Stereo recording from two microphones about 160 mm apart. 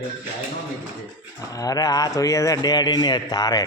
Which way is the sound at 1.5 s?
20° left (ahead or behind).